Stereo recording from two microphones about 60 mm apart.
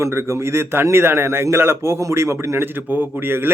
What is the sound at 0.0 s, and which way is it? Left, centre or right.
Speech, right.